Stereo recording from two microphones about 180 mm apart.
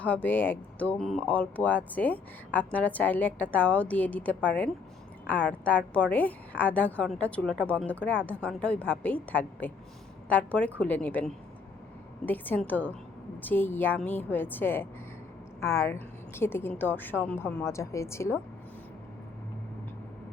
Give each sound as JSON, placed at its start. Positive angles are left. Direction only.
{"t": 0.0, "sound": "a woman's voice", "side_deg": 10}